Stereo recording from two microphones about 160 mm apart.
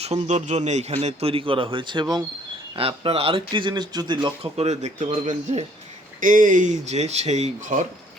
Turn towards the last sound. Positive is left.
turn(degrees=-50)  # may be behind; listen again after turning